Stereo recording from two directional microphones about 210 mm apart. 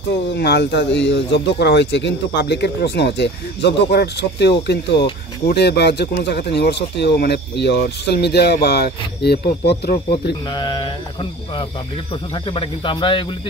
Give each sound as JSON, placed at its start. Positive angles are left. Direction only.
{"t": 0.3, "sound": "speech", "side_deg": 50}
{"t": 10.5, "sound": "speech", "side_deg": 20}
{"t": 12.4, "sound": "speech", "side_deg": 25}